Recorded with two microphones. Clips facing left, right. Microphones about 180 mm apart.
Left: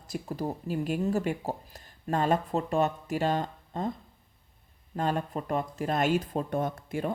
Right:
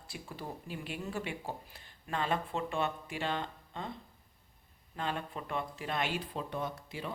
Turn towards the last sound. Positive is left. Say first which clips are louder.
# left 8 dB
turn(degrees=50)  # may be behind; listen again after turning